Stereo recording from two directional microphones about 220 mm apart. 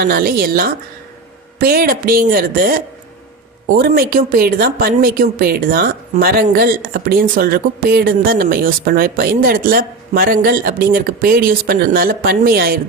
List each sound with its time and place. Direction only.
0.0 s a woman's voice: 45° right (ahead or behind)